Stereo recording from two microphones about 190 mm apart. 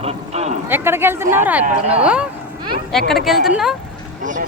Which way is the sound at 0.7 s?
10° right (ahead or behind).